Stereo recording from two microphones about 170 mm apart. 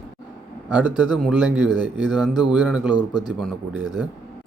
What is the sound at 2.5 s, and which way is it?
Speech, 5° right (ahead or behind).